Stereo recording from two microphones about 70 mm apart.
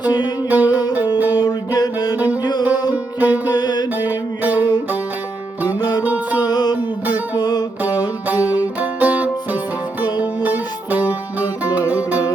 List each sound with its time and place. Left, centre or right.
0.5 s music: right
1.4 s music: left
2.4 s music: left
2.9 s music: right
3.5 s music: left
4.0 s music: right
5.6 s music: left
6.0 s music: right
6.4 s music: left
8.3 s music: right